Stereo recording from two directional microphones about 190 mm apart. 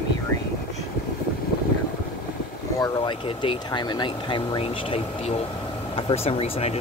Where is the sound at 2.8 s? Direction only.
25° left (ahead or behind).